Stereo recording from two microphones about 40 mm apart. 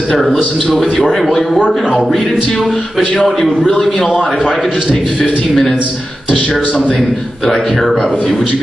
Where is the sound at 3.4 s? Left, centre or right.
Centre.